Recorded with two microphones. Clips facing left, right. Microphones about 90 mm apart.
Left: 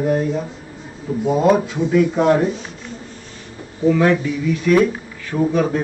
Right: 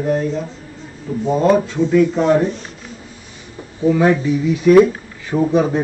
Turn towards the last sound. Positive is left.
turn(degrees=-15)  # may be behind; listen again after turning